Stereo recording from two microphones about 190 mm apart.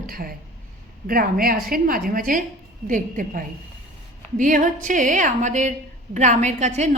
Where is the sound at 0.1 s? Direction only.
50° right (ahead or behind).